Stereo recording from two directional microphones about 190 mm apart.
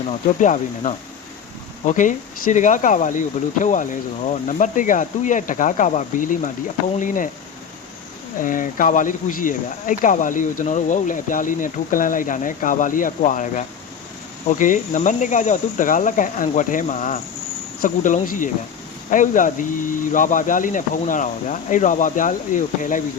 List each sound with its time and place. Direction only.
0.1 s cricket: 40° left (ahead or behind)
4.3 s speech: 40° left (ahead or behind)
8.4 s speech: 45° left (ahead or behind)
14.4 s cricket: 40° left (ahead or behind)
17.8 s speech: 45° left (ahead or behind)